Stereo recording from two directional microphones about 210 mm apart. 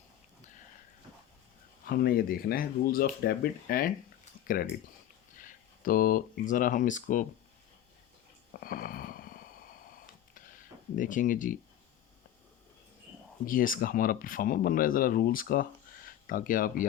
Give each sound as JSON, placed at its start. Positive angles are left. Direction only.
{"t": 1.8, "sound": "speech", "side_deg": 45}
{"t": 8.6, "sound": "a sound", "side_deg": 45}
{"t": 10.9, "sound": "speech", "side_deg": 40}
{"t": 13.4, "sound": "speech", "side_deg": 40}